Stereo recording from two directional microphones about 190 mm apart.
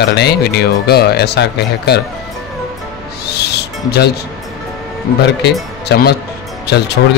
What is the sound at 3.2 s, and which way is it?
Music, 60° left (ahead or behind).